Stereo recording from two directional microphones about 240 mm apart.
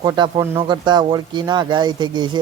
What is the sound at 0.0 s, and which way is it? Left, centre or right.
Speech, centre.